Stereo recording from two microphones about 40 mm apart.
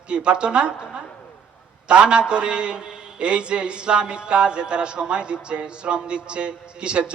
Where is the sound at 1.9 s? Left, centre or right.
Right.